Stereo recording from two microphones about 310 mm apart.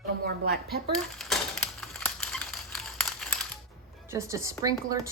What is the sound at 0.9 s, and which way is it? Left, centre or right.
Typewriter, centre.